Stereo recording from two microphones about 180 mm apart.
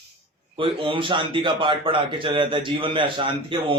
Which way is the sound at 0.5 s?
30° right (ahead or behind).